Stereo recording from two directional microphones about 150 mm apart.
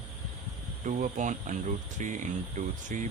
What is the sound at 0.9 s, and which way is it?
Speech, 55° right (ahead or behind).